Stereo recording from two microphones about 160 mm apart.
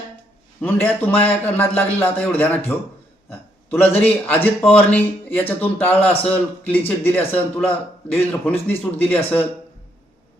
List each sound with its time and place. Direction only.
0.6 s a man's voice: 10° left (ahead or behind)
3.2 s a sound: 15° left (ahead or behind)
4.0 s a man's voice: 10° left (ahead or behind)